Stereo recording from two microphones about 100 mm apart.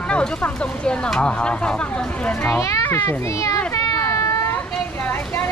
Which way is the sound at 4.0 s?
35° left (ahead or behind).